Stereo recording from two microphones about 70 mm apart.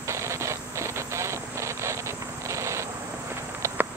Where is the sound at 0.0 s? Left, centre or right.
Right.